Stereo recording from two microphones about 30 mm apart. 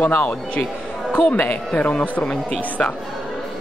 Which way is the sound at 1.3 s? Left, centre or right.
Left.